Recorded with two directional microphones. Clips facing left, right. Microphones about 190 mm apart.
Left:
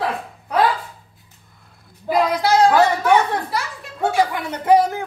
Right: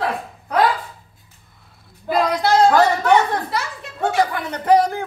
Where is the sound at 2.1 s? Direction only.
Centre (ahead or behind).